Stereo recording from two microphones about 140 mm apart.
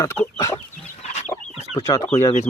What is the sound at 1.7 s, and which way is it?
Speech, 25° left (ahead or behind).